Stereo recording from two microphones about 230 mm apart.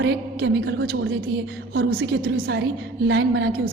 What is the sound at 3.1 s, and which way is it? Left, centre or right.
Speech, right.